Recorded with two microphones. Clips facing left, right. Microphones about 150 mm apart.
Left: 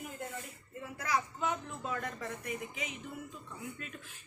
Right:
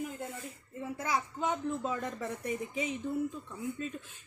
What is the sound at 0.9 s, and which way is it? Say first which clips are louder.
A woman's voice: even; 25° right (ahead or behind).